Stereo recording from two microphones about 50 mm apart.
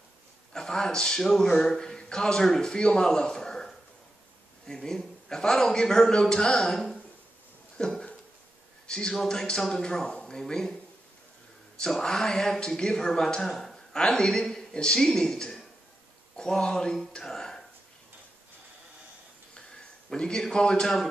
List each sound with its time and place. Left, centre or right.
0.5 s a man's voice: centre
1.8 s a man's voice: centre
7.7 s a sound: centre
8.8 s a man's voice: centre
11.8 s a man's voice: centre
20.1 s a man's voice: centre